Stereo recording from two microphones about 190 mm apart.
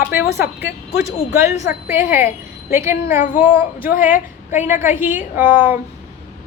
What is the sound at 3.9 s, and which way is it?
Speech, 45° left (ahead or behind).